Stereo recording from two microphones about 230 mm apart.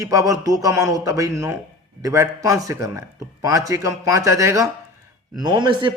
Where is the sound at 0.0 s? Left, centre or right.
Centre.